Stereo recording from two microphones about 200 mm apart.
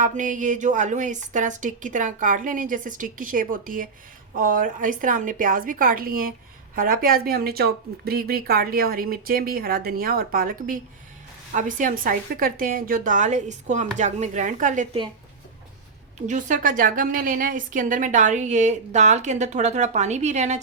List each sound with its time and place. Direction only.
0.0 s a woman's voice: 40° right (ahead or behind)
16.2 s a woman's voice: 40° right (ahead or behind)